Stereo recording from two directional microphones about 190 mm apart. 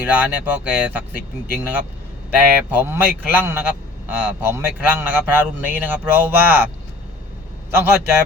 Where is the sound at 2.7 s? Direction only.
10° right (ahead or behind).